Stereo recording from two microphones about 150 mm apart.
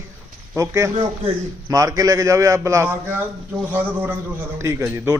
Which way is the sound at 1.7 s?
25° right (ahead or behind).